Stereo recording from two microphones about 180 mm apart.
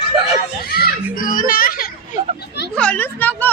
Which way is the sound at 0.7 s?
60° left (ahead or behind).